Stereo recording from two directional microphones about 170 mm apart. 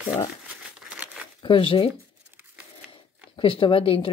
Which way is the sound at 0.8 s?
5° right (ahead or behind).